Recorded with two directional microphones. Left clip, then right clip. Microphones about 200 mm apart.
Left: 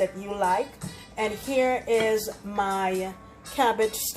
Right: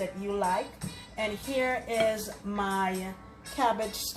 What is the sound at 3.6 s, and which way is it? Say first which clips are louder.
Speech: left 4 dB; 45° left (ahead or behind).